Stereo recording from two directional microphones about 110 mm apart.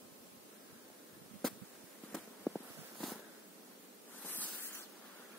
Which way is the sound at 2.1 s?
Centre (ahead or behind).